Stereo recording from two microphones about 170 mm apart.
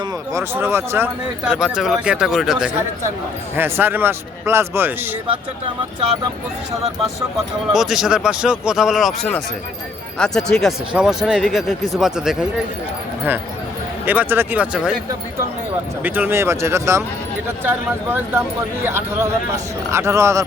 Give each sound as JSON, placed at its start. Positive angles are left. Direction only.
{"t": 0.3, "sound": "speech", "side_deg": -15}
{"t": 3.5, "sound": "speech", "side_deg": -10}
{"t": 7.7, "sound": "speech", "side_deg": 0}
{"t": 14.0, "sound": "speech", "side_deg": -10}
{"t": 16.0, "sound": "speech", "side_deg": -10}